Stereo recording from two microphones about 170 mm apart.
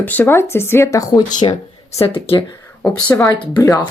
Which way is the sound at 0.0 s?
10° left (ahead or behind).